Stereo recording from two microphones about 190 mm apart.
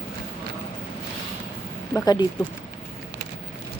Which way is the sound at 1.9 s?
20° left (ahead or behind).